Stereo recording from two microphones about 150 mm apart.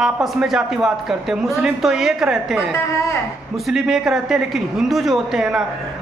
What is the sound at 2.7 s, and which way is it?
Speech, 20° left (ahead or behind).